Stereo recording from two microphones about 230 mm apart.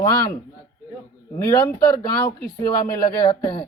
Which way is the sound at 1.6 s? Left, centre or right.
Centre.